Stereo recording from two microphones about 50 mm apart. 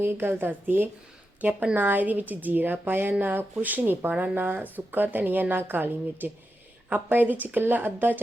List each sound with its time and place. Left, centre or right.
0.0 s a woman's voice: right
1.4 s a woman's voice: right